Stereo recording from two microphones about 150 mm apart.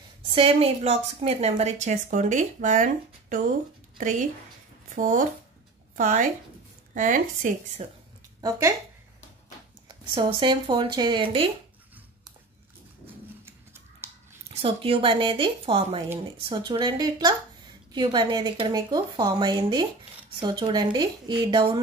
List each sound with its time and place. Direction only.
0.3 s a woman's voice: 40° right (ahead or behind); by 7.8 s 60° right (ahead or behind)
8.4 s speech: 20° right (ahead or behind)
9.8 s speech: 35° right (ahead or behind)
14.5 s a woman's voice: 40° right (ahead or behind)